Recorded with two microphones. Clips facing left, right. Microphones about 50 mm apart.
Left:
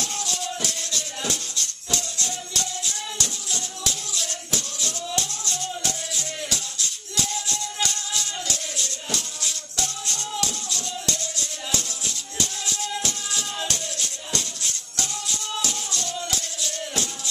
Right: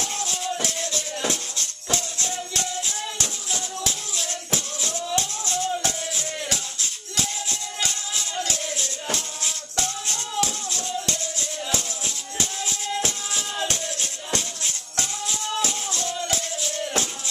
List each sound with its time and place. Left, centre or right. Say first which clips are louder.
0.0 s music: right 1 dB; right